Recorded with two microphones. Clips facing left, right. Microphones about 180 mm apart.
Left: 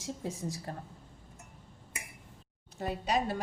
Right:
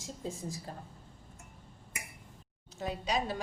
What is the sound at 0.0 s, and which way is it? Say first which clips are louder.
Speech: left 3 dB; 75° left (ahead or behind).